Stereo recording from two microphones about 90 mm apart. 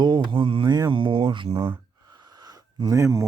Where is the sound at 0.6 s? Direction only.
50° right (ahead or behind).